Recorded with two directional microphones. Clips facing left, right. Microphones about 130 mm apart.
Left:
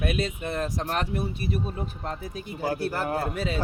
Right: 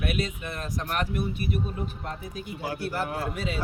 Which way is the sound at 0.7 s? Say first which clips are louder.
Left 1 dB; 30° left (ahead or behind).